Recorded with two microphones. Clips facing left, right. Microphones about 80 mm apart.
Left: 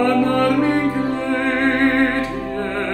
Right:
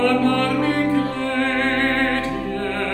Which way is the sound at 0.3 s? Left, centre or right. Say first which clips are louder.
Left 3 dB; centre.